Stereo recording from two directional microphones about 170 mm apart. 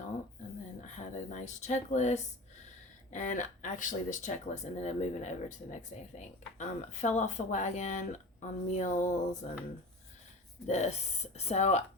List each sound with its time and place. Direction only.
0.9 s speech: 45° left (ahead or behind)
10.7 s speech: 40° left (ahead or behind)